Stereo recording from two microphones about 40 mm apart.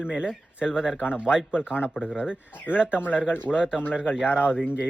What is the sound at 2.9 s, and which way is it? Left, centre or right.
Speech, left.